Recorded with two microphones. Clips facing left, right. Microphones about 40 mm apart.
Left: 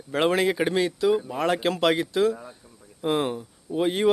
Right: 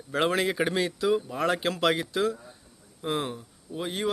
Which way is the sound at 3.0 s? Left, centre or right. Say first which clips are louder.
Left 5 dB; centre.